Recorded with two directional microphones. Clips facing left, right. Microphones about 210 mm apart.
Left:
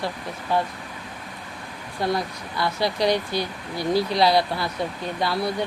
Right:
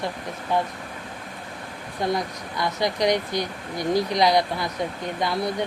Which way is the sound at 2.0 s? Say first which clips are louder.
Even; 20° right (ahead or behind).